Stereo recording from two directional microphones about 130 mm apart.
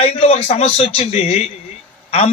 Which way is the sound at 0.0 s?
55° left (ahead or behind).